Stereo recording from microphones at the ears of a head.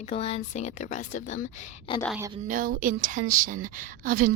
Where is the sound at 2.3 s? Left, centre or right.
Right.